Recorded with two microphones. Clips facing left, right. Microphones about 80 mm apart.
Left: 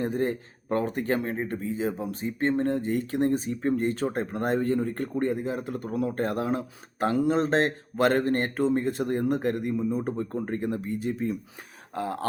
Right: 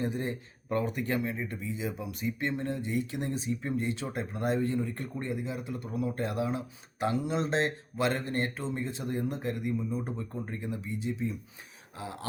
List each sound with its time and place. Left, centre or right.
0.0 s speech: left